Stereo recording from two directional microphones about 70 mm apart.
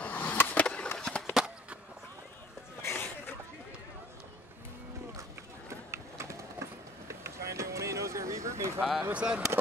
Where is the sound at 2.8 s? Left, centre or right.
Left.